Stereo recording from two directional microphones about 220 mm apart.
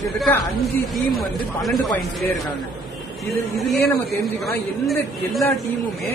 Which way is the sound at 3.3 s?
Centre (ahead or behind).